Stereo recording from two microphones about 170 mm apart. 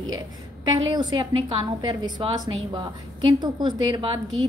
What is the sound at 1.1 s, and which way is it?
A woman's voice, 30° right (ahead or behind).